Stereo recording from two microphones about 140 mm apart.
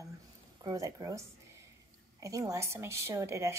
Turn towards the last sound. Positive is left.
turn(degrees=-20)  # may be behind; listen again after turning